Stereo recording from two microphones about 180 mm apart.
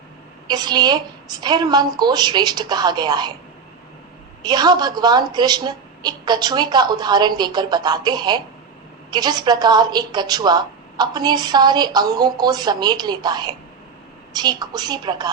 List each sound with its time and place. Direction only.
0.4 s a woman's voice: 25° right (ahead or behind)
4.4 s a woman's voice: 25° right (ahead or behind)